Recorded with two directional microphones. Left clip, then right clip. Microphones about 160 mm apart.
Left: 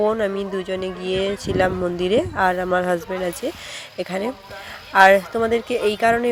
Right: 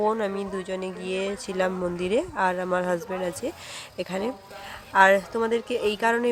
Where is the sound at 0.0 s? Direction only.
15° left (ahead or behind).